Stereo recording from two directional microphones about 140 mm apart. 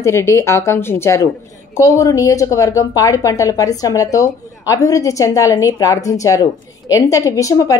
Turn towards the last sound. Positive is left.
turn(degrees=25)  # may be behind; listen again after turning